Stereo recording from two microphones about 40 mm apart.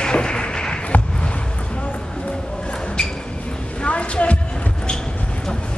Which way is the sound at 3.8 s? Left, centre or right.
Left.